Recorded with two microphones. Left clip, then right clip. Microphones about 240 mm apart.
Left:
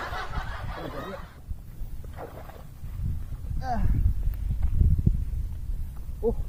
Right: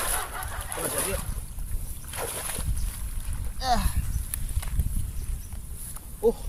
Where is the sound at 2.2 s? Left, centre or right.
Right.